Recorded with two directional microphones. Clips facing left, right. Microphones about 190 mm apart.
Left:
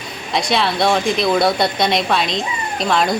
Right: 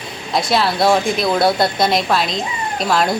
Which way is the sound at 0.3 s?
Centre (ahead or behind).